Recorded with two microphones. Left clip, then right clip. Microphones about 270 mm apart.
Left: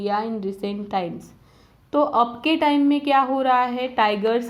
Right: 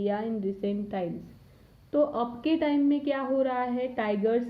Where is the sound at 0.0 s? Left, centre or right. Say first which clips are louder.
Left 6 dB; centre.